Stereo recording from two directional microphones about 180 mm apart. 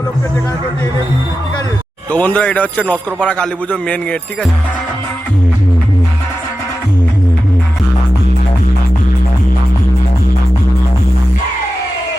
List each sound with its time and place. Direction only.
2.0 s speech: 10° left (ahead or behind)